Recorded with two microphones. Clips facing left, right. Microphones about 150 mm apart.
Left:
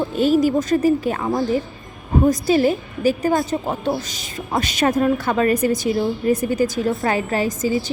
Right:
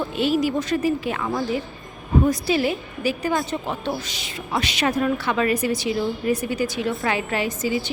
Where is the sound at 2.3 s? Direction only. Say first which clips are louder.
Left 5 dB; 45° left (ahead or behind).